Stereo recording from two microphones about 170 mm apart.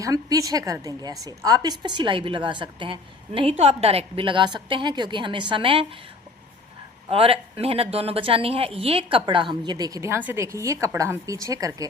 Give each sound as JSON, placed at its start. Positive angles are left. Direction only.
{"t": 0.0, "sound": "speech", "side_deg": -20}
{"t": 7.1, "sound": "speech", "side_deg": -35}